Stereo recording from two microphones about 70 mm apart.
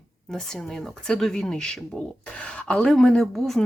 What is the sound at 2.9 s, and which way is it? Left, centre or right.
Speech, centre.